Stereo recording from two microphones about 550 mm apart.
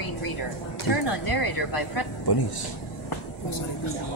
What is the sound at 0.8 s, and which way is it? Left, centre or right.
Speech, left.